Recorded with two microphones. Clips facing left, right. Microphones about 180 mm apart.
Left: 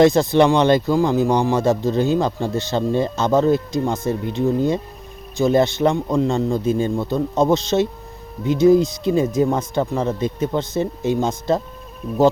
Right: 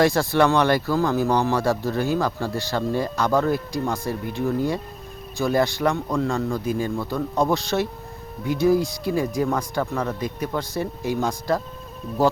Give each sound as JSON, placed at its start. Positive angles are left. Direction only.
{"t": 0.0, "sound": "speech", "side_deg": 20}